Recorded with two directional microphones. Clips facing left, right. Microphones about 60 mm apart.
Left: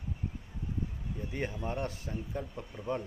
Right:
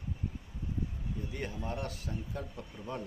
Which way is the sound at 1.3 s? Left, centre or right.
Left.